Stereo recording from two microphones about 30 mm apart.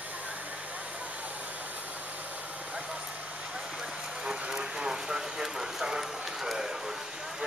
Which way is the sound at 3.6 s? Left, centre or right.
Right.